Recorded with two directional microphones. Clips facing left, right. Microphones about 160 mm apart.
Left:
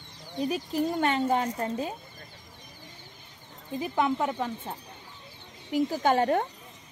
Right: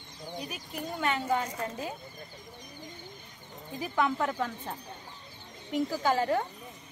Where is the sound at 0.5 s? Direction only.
30° left (ahead or behind).